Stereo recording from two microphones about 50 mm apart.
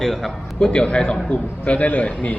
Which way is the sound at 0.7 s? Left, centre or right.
Centre.